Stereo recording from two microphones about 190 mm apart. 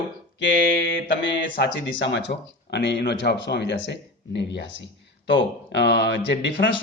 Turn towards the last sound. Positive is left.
turn(degrees=70)  # may be behind; listen again after turning